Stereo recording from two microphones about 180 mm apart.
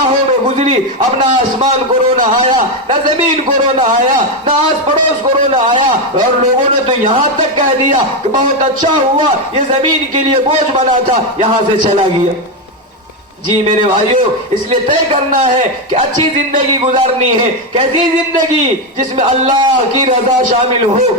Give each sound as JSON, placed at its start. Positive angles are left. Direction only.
{"t": 0.4, "sound": "a sound", "side_deg": -35}
{"t": 5.5, "sound": "a man's voice", "side_deg": -35}
{"t": 14.7, "sound": "a man's voice", "side_deg": -30}
{"t": 16.5, "sound": "a man's voice", "side_deg": -35}
{"t": 19.1, "sound": "a man's voice", "side_deg": -25}